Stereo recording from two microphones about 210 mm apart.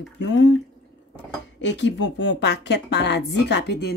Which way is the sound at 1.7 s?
55° left (ahead or behind).